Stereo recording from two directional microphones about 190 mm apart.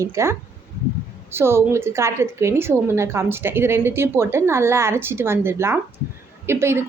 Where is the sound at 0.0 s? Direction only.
15° right (ahead or behind).